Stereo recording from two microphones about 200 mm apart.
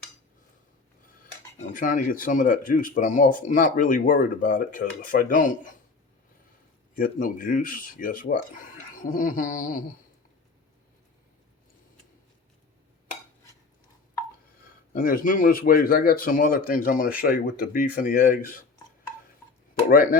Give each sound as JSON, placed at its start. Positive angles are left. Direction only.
{"t": 1.7, "sound": "speech", "side_deg": 40}
{"t": 6.9, "sound": "speech", "side_deg": 45}
{"t": 14.9, "sound": "speech", "side_deg": 45}
{"t": 19.9, "sound": "speech", "side_deg": 45}